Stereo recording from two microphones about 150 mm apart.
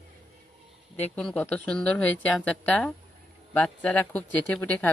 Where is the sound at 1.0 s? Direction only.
5° left (ahead or behind).